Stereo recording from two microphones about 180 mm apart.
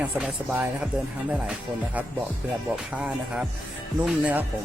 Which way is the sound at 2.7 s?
5° right (ahead or behind).